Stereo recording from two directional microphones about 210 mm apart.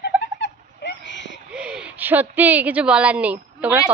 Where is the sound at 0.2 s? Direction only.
55° left (ahead or behind).